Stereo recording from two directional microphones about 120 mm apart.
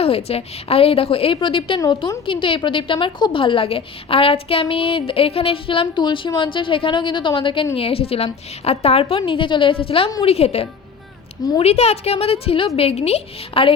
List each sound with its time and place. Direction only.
0.0 s a woman's voice: 55° left (ahead or behind)